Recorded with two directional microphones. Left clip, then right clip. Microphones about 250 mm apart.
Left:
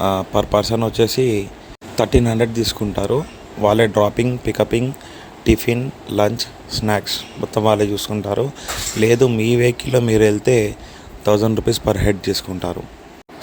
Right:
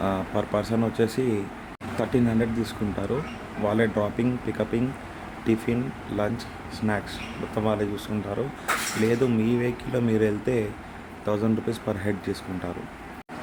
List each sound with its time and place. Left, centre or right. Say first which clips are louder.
0.0 s speech: left 9 dB; left